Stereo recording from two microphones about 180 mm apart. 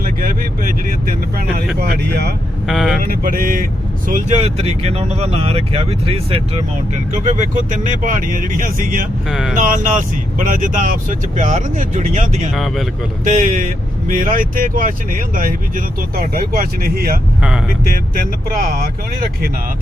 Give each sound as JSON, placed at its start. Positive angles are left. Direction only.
{"t": 0.0, "sound": "speech", "side_deg": -50}
{"t": 2.6, "sound": "speech", "side_deg": 0}
{"t": 3.0, "sound": "speech", "side_deg": -50}
{"t": 4.1, "sound": "speech", "side_deg": -35}
{"t": 9.3, "sound": "speech", "side_deg": 0}
{"t": 9.6, "sound": "speech", "side_deg": -45}
{"t": 12.5, "sound": "speech", "side_deg": 0}
{"t": 13.2, "sound": "speech", "side_deg": -45}